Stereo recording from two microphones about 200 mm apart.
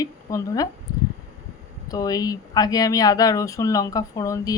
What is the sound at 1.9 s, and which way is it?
Speech, 20° left (ahead or behind).